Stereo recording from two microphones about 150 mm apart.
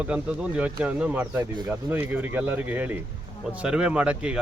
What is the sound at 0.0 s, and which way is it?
Speech, 10° right (ahead or behind).